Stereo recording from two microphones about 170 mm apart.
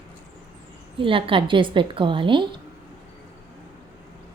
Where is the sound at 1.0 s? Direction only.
30° right (ahead or behind).